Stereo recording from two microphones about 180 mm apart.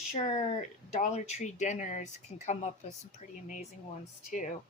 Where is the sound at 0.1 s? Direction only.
40° left (ahead or behind).